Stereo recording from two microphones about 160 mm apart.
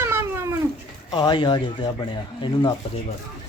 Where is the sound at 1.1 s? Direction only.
25° left (ahead or behind).